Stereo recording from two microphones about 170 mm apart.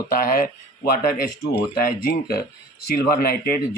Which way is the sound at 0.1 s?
60° left (ahead or behind).